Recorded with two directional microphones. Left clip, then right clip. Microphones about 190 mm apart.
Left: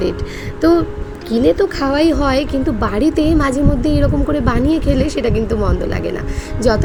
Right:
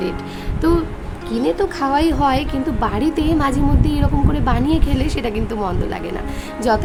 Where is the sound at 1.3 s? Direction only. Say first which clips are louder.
Left 5 dB; 20° left (ahead or behind).